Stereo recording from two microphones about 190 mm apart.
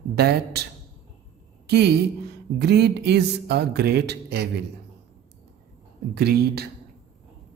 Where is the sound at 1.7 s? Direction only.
60° right (ahead or behind).